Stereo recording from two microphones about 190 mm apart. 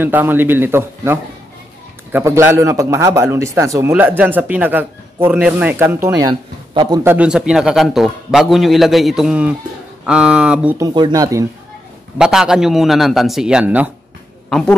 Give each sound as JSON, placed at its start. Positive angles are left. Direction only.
{"t": 0.0, "sound": "speech", "side_deg": -10}
{"t": 7.0, "sound": "a man's voice", "side_deg": -10}
{"t": 10.8, "sound": "speech", "side_deg": -20}
{"t": 12.2, "sound": "a man's voice", "side_deg": -5}